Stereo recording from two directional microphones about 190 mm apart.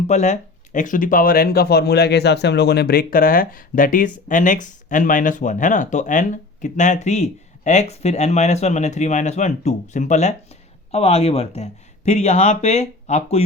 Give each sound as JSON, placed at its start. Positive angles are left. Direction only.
{"t": 0.1, "sound": "speech", "side_deg": 40}